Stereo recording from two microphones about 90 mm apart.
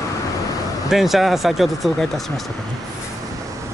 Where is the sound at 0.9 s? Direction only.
Centre (ahead or behind).